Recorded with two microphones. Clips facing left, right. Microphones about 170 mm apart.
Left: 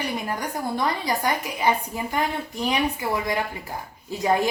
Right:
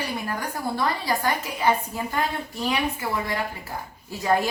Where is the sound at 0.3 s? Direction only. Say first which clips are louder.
Left 1 dB; 20° left (ahead or behind).